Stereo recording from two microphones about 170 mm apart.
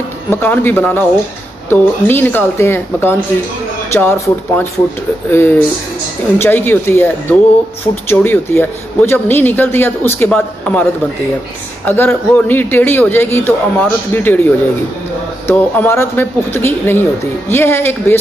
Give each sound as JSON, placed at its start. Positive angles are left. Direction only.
{"t": 0.3, "sound": "a man's voice", "side_deg": 10}